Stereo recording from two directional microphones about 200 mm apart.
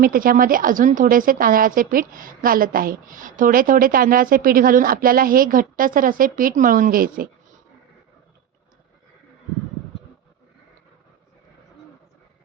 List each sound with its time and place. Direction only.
0.0 s a woman's voice: 45° right (ahead or behind)